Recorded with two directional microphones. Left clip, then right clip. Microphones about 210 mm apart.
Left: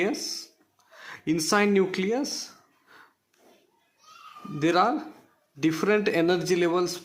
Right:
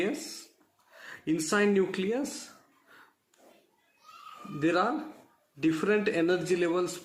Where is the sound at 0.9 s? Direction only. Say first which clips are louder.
Left 3 dB; 30° left (ahead or behind).